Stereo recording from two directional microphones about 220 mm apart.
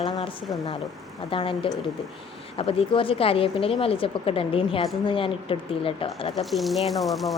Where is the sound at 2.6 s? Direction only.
25° left (ahead or behind).